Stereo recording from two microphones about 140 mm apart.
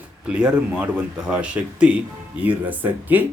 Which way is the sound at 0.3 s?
5° right (ahead or behind).